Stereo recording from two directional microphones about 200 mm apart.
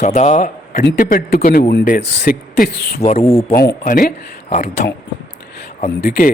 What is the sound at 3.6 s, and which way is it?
Speech, 45° left (ahead or behind).